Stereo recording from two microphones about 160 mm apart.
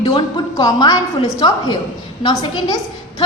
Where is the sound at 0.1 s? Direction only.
25° left (ahead or behind).